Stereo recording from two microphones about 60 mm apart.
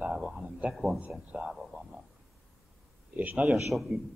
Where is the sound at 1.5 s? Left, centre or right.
Centre.